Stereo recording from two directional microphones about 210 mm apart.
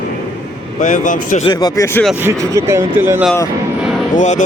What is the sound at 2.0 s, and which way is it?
Speech, 10° right (ahead or behind).